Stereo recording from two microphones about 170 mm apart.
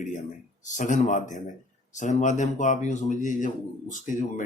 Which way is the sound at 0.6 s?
45° left (ahead or behind).